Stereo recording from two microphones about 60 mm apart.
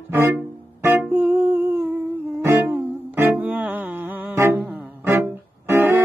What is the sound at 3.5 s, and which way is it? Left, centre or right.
Music, right.